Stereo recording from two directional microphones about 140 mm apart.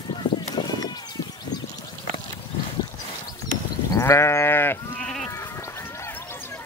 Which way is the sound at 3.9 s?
20° left (ahead or behind).